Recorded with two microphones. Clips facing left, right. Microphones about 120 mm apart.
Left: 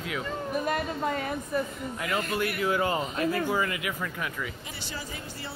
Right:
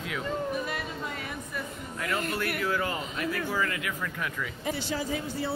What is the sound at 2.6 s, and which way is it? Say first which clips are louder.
Speech: left 3 dB; 20° left (ahead or behind).